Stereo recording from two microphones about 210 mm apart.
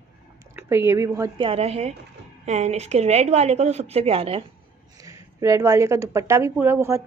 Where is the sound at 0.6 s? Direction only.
10° right (ahead or behind); by 4.4 s 30° right (ahead or behind).